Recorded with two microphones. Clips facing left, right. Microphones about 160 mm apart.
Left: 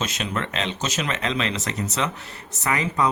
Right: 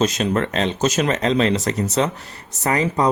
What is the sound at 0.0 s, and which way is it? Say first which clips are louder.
Speech: right 8 dB; 40° right (ahead or behind).